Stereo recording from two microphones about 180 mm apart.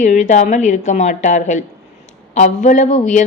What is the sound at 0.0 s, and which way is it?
A woman's voice, 40° left (ahead or behind).